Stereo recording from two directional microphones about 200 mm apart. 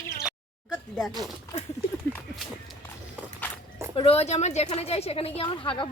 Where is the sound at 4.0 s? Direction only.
30° left (ahead or behind).